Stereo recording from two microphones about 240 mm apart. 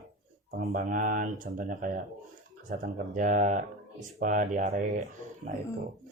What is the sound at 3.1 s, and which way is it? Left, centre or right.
Speech, right.